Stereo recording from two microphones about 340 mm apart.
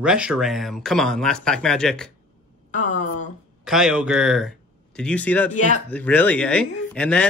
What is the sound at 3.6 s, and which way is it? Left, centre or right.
Speech, centre.